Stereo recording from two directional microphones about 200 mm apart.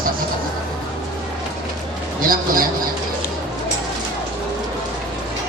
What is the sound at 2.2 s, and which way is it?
Speech, 45° right (ahead or behind).